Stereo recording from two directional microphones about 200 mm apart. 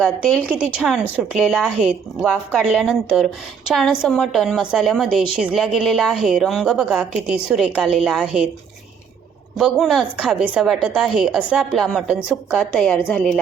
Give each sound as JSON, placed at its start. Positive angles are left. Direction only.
{"t": 0.0, "sound": "a woman's voice", "side_deg": 5}
{"t": 0.4, "sound": "a woman's voice", "side_deg": -5}
{"t": 9.6, "sound": "a woman's voice", "side_deg": 0}